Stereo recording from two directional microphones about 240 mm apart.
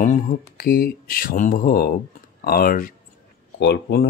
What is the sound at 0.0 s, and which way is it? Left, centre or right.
Speech, left.